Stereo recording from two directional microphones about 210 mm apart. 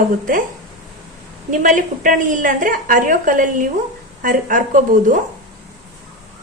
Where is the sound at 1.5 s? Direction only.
40° right (ahead or behind).